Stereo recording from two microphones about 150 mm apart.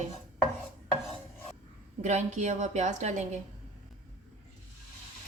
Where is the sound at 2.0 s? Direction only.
55° right (ahead or behind).